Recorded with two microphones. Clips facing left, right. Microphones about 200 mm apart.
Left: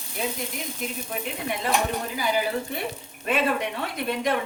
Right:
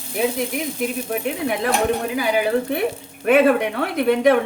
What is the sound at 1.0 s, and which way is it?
Speech, 60° right (ahead or behind).